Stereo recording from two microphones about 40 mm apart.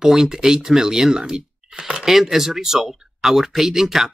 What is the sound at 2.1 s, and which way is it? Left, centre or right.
Speech, centre.